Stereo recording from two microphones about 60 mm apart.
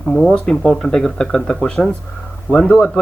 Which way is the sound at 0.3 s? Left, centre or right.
Centre.